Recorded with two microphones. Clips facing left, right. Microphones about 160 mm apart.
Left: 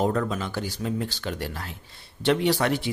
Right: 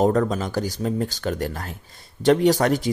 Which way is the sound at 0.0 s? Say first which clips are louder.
Right 5 dB; 40° right (ahead or behind).